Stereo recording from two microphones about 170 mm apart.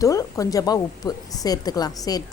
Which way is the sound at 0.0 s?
20° left (ahead or behind).